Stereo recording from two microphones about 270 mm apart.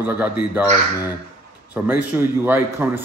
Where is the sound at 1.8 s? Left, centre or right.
Centre.